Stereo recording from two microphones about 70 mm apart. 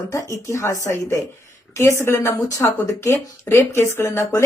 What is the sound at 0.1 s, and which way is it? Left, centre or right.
A woman's voice, left.